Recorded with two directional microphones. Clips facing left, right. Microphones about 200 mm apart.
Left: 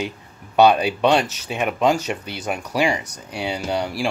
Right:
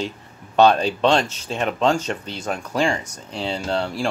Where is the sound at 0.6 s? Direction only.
10° left (ahead or behind).